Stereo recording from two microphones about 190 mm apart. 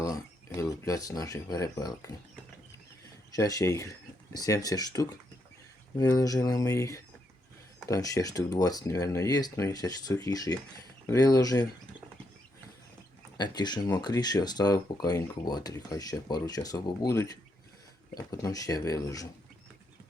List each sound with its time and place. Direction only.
0.0 s speech: 15° left (ahead or behind)
3.3 s speech: 20° left (ahead or behind)
13.3 s speech: 20° left (ahead or behind)